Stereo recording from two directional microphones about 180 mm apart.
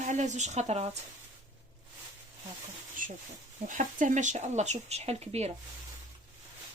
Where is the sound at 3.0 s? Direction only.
50° right (ahead or behind).